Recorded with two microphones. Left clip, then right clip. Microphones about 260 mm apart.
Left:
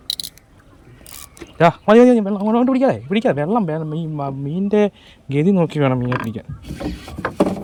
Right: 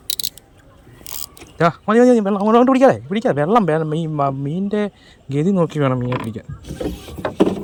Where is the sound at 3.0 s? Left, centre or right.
Centre.